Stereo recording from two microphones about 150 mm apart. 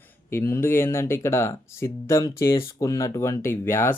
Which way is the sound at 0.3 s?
15° left (ahead or behind).